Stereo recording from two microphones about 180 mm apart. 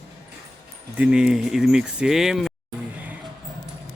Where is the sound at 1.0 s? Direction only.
5° right (ahead or behind).